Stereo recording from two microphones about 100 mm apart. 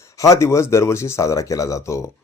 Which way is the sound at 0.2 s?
30° left (ahead or behind).